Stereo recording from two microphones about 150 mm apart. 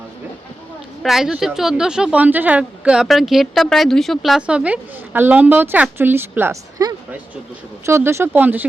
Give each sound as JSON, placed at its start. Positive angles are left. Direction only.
{"t": 1.0, "sound": "speech", "side_deg": 0}